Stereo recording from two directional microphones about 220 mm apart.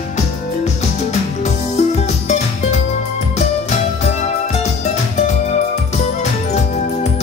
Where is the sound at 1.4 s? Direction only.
30° left (ahead or behind).